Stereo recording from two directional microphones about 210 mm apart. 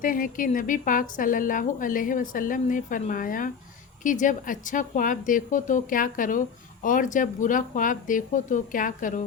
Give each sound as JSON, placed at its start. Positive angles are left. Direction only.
{"t": 0.0, "sound": "a woman's voice", "side_deg": 40}